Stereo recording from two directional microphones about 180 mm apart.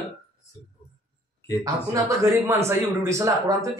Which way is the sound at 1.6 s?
15° right (ahead or behind).